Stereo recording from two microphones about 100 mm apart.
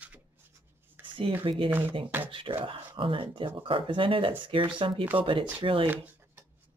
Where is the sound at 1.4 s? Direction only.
60° right (ahead or behind).